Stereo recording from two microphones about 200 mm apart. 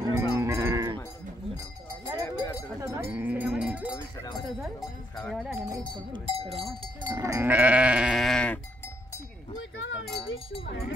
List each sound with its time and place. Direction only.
0.0 s sheep: 15° right (ahead or behind)
2.2 s a sound: 15° left (ahead or behind)
2.8 s cowbell: 15° right (ahead or behind)
3.9 s cowbell: 20° left (ahead or behind)
5.1 s speech: centre (ahead or behind)
6.2 s cowbell: 30° right (ahead or behind)
7.1 s livestock: 15° right (ahead or behind); by 9.2 s 10° left (ahead or behind)
9.6 s a sound: 75° left (ahead or behind)